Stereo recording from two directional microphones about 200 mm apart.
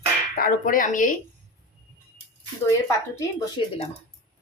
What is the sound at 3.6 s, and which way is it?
Speech, 25° left (ahead or behind).